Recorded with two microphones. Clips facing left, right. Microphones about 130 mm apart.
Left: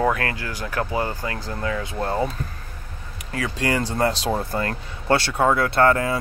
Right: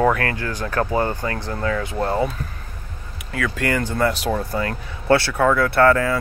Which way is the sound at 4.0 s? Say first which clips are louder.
Right 1 dB; 30° left (ahead or behind).